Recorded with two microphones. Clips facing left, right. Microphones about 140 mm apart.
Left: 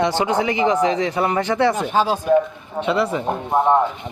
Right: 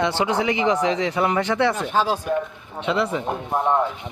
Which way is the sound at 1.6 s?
5° left (ahead or behind).